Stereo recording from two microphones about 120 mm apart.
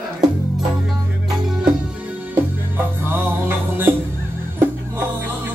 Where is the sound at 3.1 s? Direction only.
15° right (ahead or behind).